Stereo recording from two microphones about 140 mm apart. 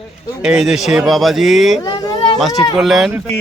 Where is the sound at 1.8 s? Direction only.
30° left (ahead or behind).